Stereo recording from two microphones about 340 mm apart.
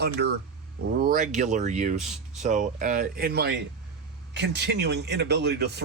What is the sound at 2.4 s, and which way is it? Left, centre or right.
Speech, right.